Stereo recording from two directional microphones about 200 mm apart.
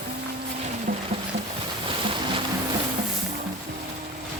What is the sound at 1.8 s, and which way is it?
Boat, 25° right (ahead or behind).